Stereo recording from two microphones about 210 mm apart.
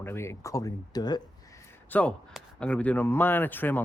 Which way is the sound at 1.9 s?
5° left (ahead or behind).